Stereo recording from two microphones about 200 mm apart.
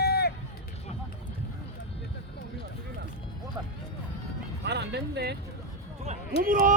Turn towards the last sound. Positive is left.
turn(degrees=-45)  # may be behind; listen again after turning